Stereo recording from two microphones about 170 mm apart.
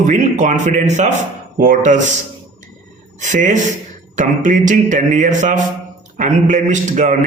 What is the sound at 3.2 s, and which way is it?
Speech, 50° right (ahead or behind).